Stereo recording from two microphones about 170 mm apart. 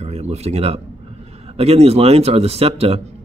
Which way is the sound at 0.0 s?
40° right (ahead or behind).